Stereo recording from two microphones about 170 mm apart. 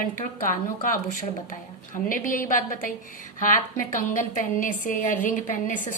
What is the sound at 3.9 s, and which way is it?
A woman's voice, 50° left (ahead or behind).